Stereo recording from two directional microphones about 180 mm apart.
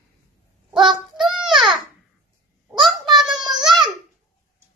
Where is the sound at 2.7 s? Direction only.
Centre (ahead or behind).